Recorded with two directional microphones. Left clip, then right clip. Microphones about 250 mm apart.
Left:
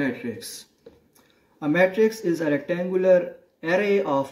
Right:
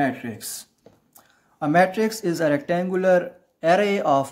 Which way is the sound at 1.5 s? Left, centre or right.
Right.